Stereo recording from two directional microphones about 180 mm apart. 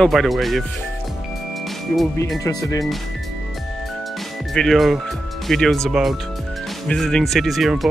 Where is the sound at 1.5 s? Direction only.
Centre (ahead or behind).